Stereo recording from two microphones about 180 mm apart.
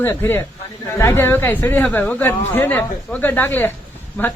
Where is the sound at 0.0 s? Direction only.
10° left (ahead or behind).